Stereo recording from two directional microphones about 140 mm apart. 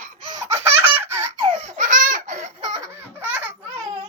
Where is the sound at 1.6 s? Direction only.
60° right (ahead or behind).